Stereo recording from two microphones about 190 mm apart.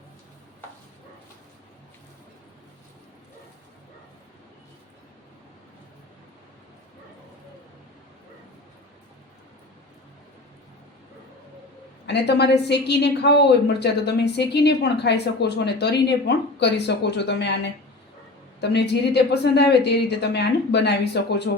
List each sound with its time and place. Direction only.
12.0 s a woman's voice: 60° left (ahead or behind)